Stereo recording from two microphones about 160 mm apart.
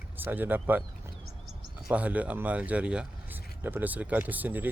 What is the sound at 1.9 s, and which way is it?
Speech, 10° right (ahead or behind).